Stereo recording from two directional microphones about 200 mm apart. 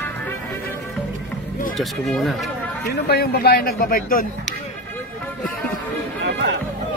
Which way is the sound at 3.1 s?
50° left (ahead or behind).